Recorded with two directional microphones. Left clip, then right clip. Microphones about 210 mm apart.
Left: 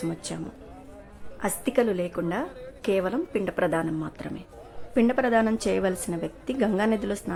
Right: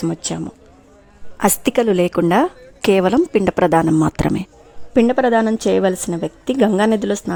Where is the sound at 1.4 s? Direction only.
50° right (ahead or behind).